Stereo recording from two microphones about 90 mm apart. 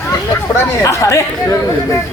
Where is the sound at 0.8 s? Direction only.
35° left (ahead or behind).